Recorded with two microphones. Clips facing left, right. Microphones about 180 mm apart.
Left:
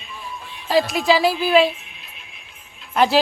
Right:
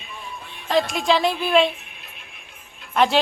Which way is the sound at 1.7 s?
55° right (ahead or behind).